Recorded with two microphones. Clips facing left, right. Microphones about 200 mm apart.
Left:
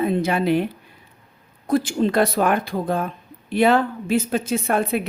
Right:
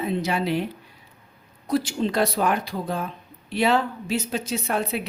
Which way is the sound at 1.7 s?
50° left (ahead or behind).